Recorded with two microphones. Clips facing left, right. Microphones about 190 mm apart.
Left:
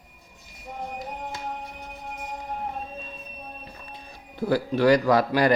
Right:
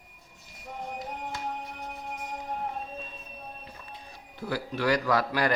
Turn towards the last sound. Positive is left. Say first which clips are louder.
# left 6 dB
turn(degrees=20)  # may be behind; listen again after turning